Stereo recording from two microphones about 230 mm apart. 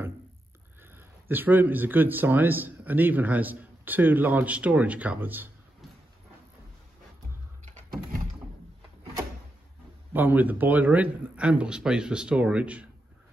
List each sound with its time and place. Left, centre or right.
1.3 s a man's voice: centre
7.6 s computer keyboard: right
10.1 s a man's voice: centre